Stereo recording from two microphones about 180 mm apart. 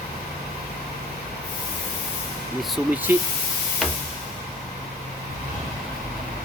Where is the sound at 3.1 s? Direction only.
10° right (ahead or behind).